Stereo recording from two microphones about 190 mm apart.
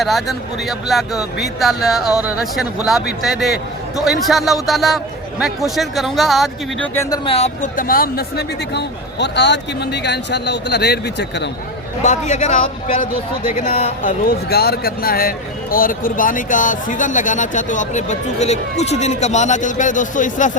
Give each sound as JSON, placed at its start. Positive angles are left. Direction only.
{"t": 0.0, "sound": "speech", "side_deg": 0}
{"t": 7.3, "sound": "speech", "side_deg": 35}
{"t": 12.0, "sound": "speech", "side_deg": 40}
{"t": 14.0, "sound": "speech", "side_deg": 50}